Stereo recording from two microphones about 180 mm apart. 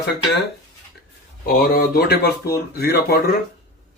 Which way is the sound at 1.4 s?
55° left (ahead or behind).